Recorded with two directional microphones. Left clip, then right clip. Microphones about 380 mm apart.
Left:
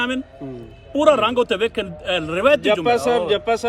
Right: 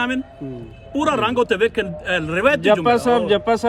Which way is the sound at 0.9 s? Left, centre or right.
Centre.